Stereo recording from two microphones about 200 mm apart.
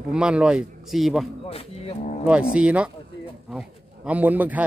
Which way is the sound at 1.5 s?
30° left (ahead or behind).